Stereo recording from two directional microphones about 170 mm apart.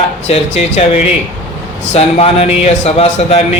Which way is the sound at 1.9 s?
35° left (ahead or behind).